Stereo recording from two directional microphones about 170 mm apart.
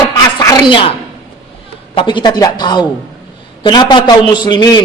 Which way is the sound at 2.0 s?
30° left (ahead or behind).